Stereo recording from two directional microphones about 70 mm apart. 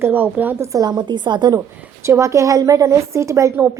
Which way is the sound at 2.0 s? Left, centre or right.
Right.